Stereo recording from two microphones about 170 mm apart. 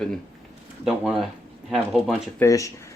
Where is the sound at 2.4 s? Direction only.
20° left (ahead or behind).